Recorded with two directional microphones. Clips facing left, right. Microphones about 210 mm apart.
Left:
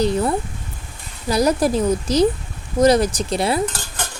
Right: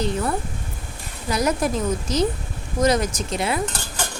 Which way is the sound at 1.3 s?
35° left (ahead or behind).